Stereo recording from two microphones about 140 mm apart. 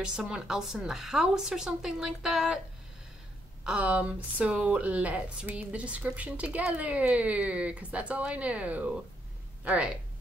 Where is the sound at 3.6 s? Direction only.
10° right (ahead or behind).